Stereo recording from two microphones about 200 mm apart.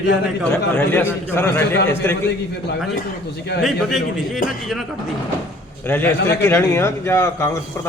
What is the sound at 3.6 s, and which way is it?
Speech, centre (ahead or behind).